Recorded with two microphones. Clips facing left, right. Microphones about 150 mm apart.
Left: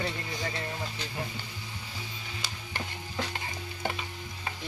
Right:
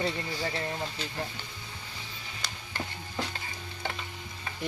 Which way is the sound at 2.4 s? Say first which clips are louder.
Right 2 dB; 5° left (ahead or behind).